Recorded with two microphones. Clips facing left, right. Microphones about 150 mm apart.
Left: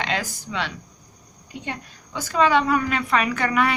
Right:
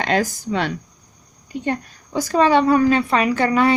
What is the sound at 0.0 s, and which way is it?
A woman's voice, 45° right (ahead or behind).